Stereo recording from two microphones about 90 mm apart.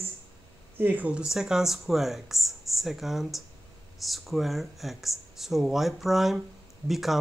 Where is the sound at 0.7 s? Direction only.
20° right (ahead or behind).